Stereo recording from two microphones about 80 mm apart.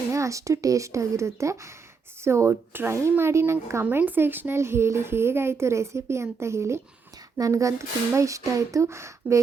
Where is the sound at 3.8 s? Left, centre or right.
Right.